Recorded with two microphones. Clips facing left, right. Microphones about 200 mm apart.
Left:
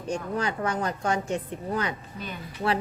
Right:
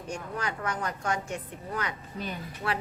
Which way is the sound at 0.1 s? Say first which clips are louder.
Left 6 dB; 30° left (ahead or behind).